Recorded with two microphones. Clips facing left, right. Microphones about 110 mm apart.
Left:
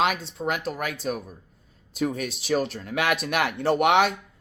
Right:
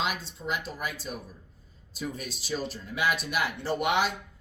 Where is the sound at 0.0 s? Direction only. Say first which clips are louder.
Left 7 dB; 75° left (ahead or behind).